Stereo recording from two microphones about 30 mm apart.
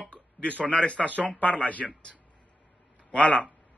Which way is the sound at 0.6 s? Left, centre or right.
Left.